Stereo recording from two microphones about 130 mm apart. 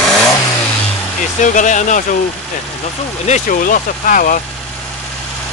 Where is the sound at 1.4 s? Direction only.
75° left (ahead or behind).